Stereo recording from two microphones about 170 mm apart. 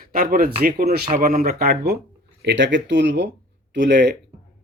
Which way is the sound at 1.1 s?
50° right (ahead or behind).